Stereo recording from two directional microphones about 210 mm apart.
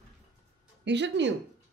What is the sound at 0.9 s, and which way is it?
Speech, 55° right (ahead or behind).